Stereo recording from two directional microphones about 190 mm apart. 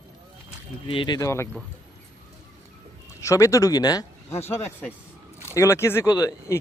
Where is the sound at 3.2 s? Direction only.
15° left (ahead or behind).